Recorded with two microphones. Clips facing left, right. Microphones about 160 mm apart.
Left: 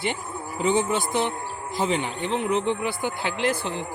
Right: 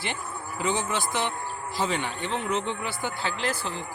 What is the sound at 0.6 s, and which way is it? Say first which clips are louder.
Speech: left 5 dB; 20° left (ahead or behind).